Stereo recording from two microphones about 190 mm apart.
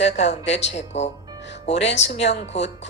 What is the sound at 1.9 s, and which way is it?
Speech, 70° left (ahead or behind).